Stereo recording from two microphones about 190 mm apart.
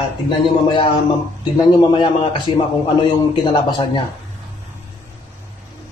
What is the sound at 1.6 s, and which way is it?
A man's voice, 20° left (ahead or behind).